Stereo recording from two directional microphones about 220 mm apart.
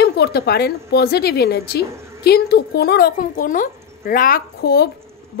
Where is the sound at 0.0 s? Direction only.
50° left (ahead or behind).